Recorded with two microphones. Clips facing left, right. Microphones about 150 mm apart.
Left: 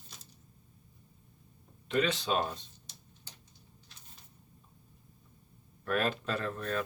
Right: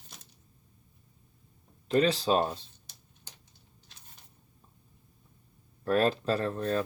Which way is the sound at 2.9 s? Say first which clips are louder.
Left 2 dB; 55° right (ahead or behind).